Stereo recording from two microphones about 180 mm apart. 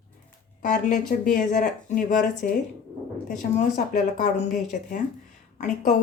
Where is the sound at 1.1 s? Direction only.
45° left (ahead or behind).